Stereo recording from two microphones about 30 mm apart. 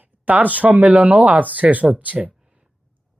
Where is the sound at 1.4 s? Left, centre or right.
Right.